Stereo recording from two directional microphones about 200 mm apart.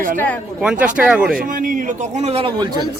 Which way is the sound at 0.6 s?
5° right (ahead or behind).